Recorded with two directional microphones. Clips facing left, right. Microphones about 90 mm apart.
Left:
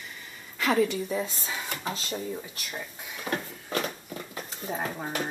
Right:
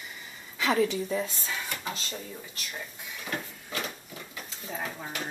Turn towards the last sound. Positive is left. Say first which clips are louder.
# left 5 dB
turn(degrees=40)  # may be behind; listen again after turning